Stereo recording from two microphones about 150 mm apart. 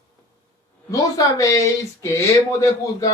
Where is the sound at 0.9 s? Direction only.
20° left (ahead or behind).